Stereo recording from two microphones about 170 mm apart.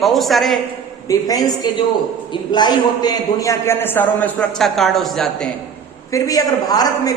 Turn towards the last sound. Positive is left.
turn(degrees=20)  # may be behind; listen again after turning